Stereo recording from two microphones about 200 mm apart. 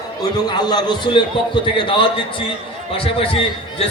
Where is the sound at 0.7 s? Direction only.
20° left (ahead or behind).